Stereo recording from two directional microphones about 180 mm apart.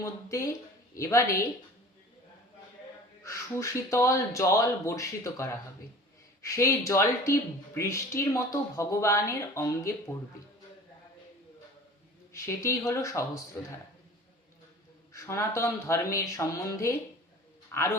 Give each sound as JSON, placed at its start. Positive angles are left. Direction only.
{"t": 0.0, "sound": "speech", "side_deg": 15}
{"t": 3.2, "sound": "speech", "side_deg": 15}
{"t": 12.3, "sound": "speech", "side_deg": 15}
{"t": 15.1, "sound": "speech", "side_deg": 15}
{"t": 17.7, "sound": "a sound", "side_deg": 15}